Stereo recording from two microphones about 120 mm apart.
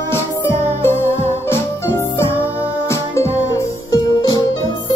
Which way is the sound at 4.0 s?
35° left (ahead or behind).